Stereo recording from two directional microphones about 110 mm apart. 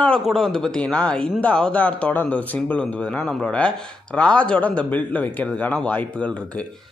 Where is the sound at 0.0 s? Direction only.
5° left (ahead or behind).